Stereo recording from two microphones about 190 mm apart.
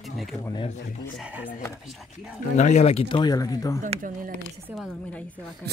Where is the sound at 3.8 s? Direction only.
45° right (ahead or behind).